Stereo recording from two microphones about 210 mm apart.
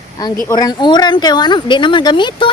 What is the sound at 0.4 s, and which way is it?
Speech, 20° left (ahead or behind).